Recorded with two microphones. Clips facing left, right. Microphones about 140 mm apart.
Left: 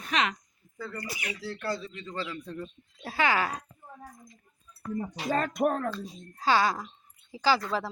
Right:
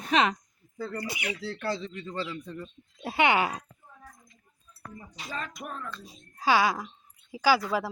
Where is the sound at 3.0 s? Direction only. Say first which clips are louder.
Right 3 dB; 25° right (ahead or behind).